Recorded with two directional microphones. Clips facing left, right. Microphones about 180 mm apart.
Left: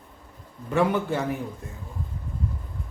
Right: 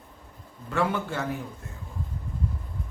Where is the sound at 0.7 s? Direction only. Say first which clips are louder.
Left 4 dB; 15° left (ahead or behind).